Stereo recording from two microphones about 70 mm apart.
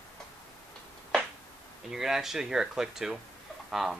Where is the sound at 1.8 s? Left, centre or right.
Centre.